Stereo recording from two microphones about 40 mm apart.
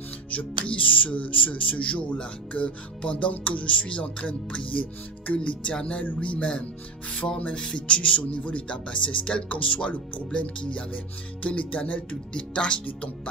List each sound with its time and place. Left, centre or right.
0.3 s speech: left
5.2 s speech: left